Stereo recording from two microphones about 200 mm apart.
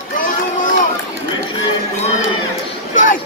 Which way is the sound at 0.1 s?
40° left (ahead or behind).